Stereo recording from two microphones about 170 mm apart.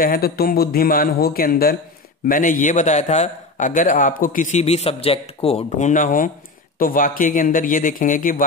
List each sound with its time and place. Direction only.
0.0 s a man's voice: 60° left (ahead or behind)